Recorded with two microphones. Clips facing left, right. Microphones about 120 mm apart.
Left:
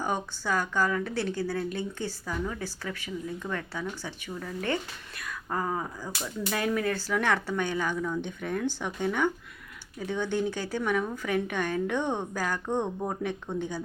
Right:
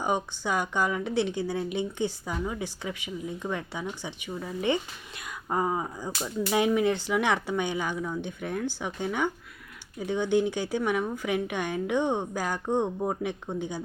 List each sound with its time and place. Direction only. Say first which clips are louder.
0.0 s speech: right 2 dB; 15° right (ahead or behind)